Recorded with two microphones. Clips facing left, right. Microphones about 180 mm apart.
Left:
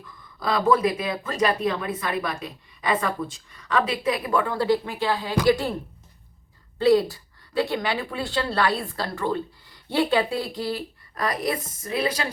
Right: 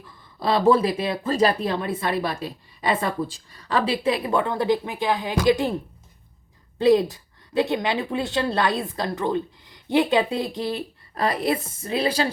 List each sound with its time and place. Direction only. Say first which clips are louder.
0.3 s speech: right 3 dB; 30° right (ahead or behind)
6.7 s speech: right 1 dB; 20° right (ahead or behind)